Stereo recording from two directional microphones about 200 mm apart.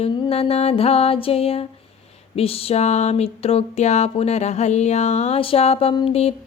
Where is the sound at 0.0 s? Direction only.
30° left (ahead or behind).